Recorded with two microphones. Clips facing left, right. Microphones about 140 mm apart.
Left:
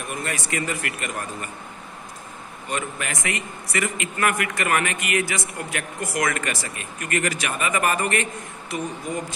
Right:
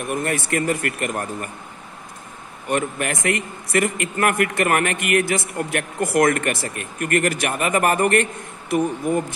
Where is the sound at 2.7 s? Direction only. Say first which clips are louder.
Right 6 dB; 60° right (ahead or behind).